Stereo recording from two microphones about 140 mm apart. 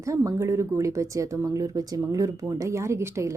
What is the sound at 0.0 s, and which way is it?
A woman's voice, 20° right (ahead or behind).